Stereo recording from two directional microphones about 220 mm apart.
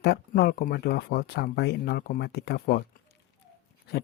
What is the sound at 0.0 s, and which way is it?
Speech, 45° left (ahead or behind).